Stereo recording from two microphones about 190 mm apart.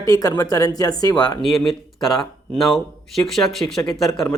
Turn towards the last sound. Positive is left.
turn(degrees=0)  # may be behind; listen again after turning